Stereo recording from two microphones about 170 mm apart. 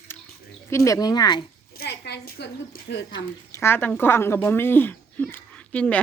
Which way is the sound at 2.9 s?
70° left (ahead or behind).